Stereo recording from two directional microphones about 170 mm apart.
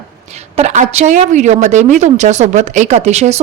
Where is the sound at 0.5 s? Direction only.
45° right (ahead or behind).